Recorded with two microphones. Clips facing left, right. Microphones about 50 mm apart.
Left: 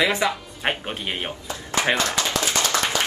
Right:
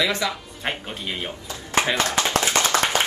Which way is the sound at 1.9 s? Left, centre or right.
Right.